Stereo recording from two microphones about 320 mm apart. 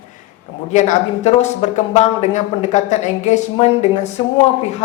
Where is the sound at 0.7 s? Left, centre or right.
Left.